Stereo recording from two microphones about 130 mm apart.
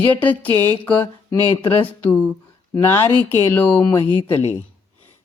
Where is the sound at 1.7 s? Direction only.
10° left (ahead or behind).